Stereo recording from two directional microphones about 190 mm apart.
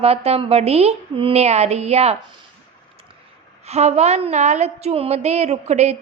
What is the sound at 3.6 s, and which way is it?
A woman's voice, 35° right (ahead or behind).